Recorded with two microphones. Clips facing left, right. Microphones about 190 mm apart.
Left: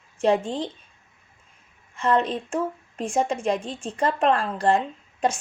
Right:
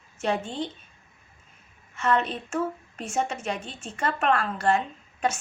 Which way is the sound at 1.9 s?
35° left (ahead or behind).